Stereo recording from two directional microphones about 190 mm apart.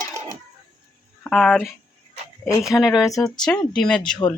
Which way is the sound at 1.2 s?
5° left (ahead or behind).